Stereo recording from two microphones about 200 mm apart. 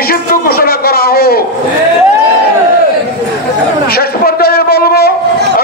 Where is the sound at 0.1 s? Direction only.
45° left (ahead or behind).